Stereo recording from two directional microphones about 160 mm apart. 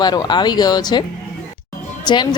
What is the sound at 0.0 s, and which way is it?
A woman's voice, 25° left (ahead or behind).